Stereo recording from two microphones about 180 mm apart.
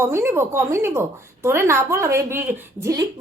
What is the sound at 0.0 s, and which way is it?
A woman's voice, 15° right (ahead or behind).